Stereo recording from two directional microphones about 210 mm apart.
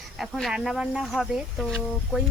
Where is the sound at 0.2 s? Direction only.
Centre (ahead or behind).